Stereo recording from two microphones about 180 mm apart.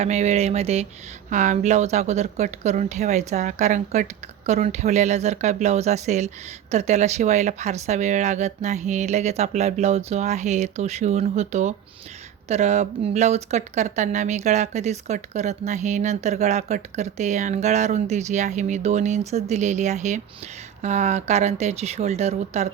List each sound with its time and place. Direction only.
0.0 s speech: 35° right (ahead or behind)